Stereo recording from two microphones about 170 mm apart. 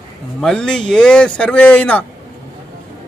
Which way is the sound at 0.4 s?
5° left (ahead or behind).